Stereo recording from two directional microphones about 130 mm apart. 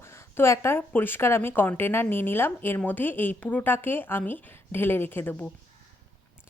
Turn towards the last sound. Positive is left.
turn(degrees=15)  # may be behind; listen again after turning